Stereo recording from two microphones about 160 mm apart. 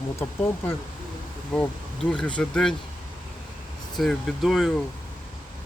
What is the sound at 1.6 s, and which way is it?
Speech, 5° left (ahead or behind).